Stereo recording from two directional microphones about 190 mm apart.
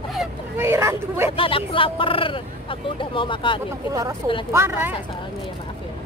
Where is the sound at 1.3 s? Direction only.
25° left (ahead or behind).